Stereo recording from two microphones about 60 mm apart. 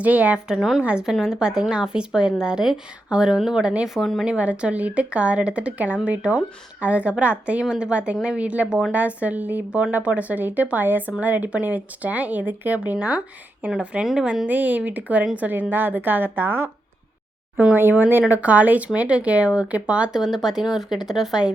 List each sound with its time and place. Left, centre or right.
0.0 s speech: right
0.4 s speech: centre
3.8 s a woman's voice: centre
4.3 s speech: right
13.7 s speech: centre
14.4 s a woman's voice: right
17.7 s speech: right; by 21.5 s centre